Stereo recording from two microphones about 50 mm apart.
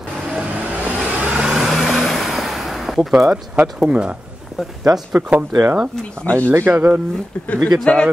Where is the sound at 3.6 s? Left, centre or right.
Centre.